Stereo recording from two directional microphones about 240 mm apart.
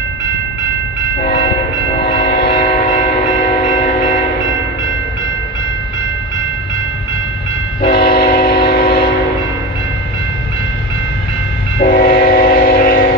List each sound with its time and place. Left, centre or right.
1.3 s train: left
2.2 s train: left
2.5 s train: left
7.8 s train: left
11.8 s train: left